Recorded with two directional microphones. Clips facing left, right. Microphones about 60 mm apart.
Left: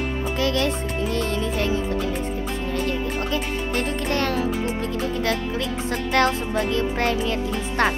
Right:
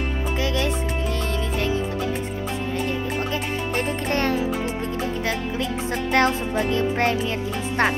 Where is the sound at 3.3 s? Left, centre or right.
Right.